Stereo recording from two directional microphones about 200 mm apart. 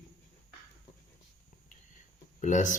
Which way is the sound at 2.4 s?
40° left (ahead or behind).